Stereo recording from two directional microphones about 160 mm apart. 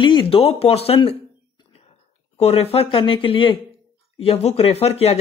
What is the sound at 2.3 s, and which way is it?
Speech, 40° left (ahead or behind).